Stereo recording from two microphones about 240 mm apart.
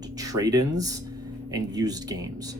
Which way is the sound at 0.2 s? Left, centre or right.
Centre.